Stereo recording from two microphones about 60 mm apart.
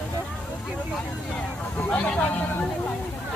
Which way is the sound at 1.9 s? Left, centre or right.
Centre.